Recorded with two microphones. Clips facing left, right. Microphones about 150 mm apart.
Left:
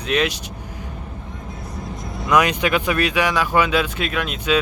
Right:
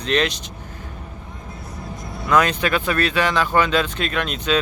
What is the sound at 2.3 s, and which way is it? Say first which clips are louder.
Speech: left 1 dB; 15° left (ahead or behind).